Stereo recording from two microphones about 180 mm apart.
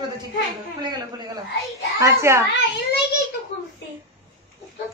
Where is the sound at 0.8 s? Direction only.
25° right (ahead or behind).